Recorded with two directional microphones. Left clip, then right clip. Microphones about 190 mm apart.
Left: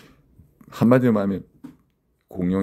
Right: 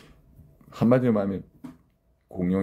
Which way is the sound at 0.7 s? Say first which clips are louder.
Left 4 dB; 35° left (ahead or behind).